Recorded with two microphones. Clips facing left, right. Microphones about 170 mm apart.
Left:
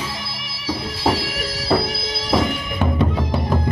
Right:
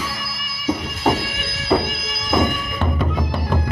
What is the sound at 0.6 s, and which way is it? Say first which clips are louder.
Music: right 1 dB; 30° left (ahead or behind).